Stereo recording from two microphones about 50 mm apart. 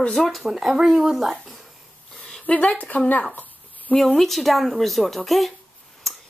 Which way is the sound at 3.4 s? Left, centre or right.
Left.